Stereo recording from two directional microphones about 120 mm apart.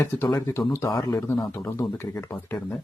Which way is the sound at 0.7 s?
25° left (ahead or behind).